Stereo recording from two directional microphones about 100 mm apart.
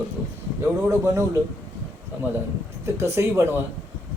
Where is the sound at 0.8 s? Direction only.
30° right (ahead or behind).